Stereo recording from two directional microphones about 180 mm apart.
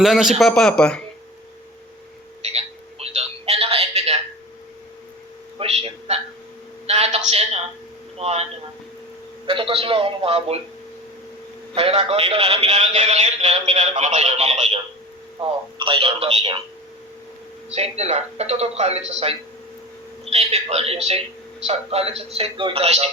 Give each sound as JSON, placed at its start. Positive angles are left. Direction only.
{"t": 0.0, "sound": "a man's voice", "side_deg": 0}
{"t": 2.4, "sound": "telephone", "side_deg": -35}
{"t": 5.5, "sound": "a sound", "side_deg": -35}
{"t": 8.2, "sound": "a man's voice", "side_deg": -35}
{"t": 9.5, "sound": "a man's voice", "side_deg": -30}
{"t": 11.7, "sound": "a man's voice", "side_deg": -35}
{"t": 15.8, "sound": "a man's voice", "side_deg": -30}
{"t": 17.7, "sound": "a man's voice", "side_deg": -35}